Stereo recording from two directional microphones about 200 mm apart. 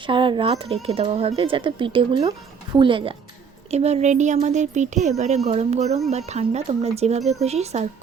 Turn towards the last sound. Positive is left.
turn(degrees=-35)  # may be behind; listen again after turning